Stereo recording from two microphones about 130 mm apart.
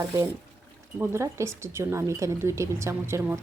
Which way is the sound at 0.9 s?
20° right (ahead or behind).